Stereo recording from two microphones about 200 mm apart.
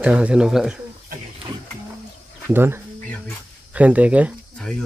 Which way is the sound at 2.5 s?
10° right (ahead or behind).